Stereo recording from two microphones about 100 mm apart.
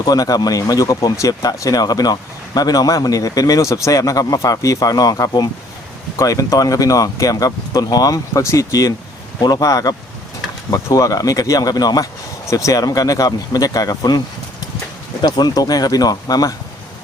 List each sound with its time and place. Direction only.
0.0 s a man's voice: 40° left (ahead or behind)
15.2 s a man's voice: 40° left (ahead or behind)